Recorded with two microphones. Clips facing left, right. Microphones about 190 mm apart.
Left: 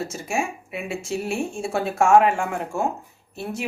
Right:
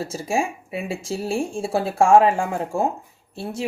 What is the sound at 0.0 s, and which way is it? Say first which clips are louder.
Speech: right 3 dB; 30° right (ahead or behind).